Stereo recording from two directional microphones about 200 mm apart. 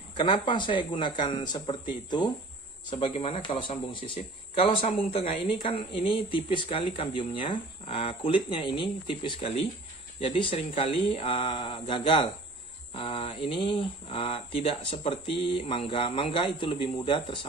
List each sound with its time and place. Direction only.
0.1 s speech: 25° left (ahead or behind)